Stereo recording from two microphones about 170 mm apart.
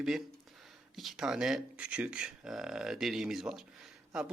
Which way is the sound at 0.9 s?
Centre (ahead or behind).